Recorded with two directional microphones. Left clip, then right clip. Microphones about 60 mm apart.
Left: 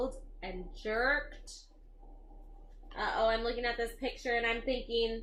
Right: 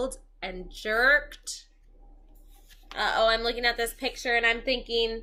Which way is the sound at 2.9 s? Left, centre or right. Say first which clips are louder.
Right 7 dB; right.